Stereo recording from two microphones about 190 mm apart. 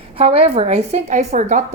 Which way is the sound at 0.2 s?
30° right (ahead or behind).